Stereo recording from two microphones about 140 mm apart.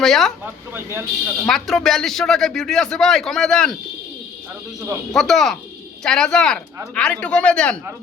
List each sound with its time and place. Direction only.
0.0 s a man's voice: 5° left (ahead or behind)
0.7 s speech: 20° right (ahead or behind)
1.5 s a man's voice: centre (ahead or behind)
5.1 s a man's voice: centre (ahead or behind)